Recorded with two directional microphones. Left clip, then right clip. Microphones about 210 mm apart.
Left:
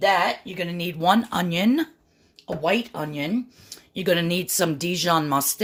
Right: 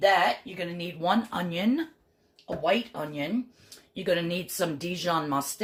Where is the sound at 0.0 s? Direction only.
50° left (ahead or behind).